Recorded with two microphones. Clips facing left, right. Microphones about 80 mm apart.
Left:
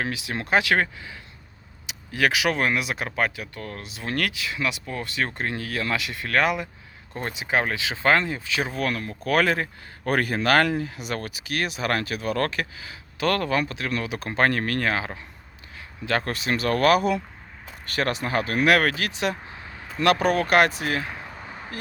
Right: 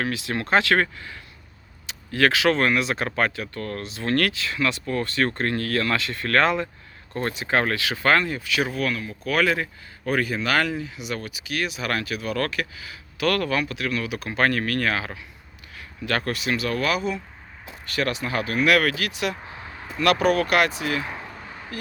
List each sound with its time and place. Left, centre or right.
0.0 s speech: centre
8.8 s speech: left
10.1 s speech: left
17.8 s speech: left